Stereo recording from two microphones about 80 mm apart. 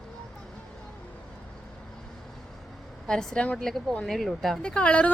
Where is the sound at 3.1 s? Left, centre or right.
Centre.